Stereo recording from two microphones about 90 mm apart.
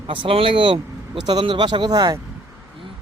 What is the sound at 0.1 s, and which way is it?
Speech, 80° right.